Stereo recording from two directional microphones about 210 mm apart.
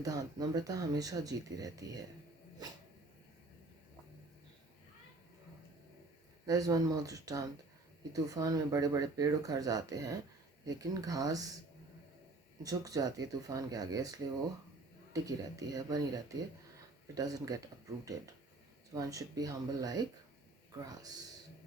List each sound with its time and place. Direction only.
0.0 s speech: 15° right (ahead or behind)
6.4 s speech: 15° right (ahead or behind)
12.6 s speech: 15° right (ahead or behind)
18.9 s speech: 15° right (ahead or behind)